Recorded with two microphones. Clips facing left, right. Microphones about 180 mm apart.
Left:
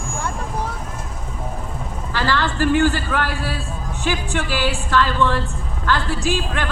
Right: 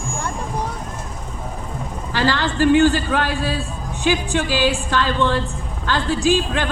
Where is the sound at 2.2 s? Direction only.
15° right (ahead or behind).